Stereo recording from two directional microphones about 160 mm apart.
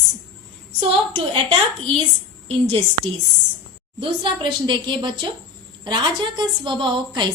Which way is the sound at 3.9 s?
30° right (ahead or behind).